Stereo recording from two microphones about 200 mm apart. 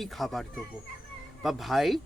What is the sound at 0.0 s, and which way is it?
Speech, centre (ahead or behind).